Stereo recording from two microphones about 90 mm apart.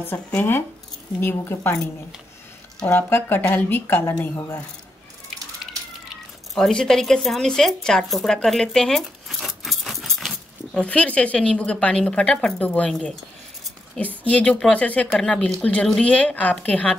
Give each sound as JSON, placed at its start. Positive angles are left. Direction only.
{"t": 0.4, "sound": "speech", "side_deg": 25}
{"t": 2.9, "sound": "speech", "side_deg": 25}
{"t": 6.5, "sound": "speech", "side_deg": 5}
{"t": 10.8, "sound": "a woman's voice", "side_deg": 15}